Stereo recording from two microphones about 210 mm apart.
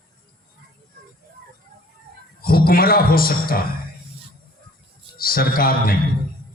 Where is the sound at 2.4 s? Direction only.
45° left (ahead or behind).